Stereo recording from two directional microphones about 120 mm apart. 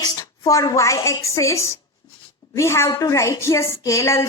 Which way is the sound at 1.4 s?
25° left (ahead or behind).